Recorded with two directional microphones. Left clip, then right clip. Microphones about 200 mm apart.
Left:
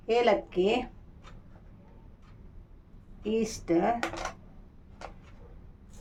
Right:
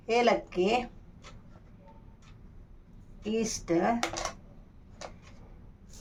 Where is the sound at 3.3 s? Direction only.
25° left (ahead or behind).